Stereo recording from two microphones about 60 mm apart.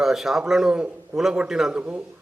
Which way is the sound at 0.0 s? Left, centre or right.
Centre.